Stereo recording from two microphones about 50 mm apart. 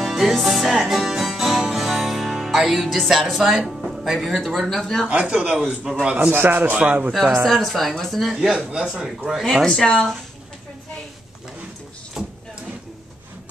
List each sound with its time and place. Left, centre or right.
0.0 s music: centre
5.2 s a man's voice: centre
5.9 s a man's voice: centre
6.3 s a man's voice: right
7.4 s speech: centre
8.5 s a man's voice: centre
9.8 s speech: centre
12.2 s a sound: centre